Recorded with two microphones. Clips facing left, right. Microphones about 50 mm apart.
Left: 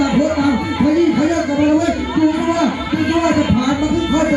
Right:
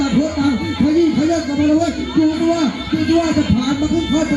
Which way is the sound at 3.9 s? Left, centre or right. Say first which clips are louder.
Left 1 dB; left.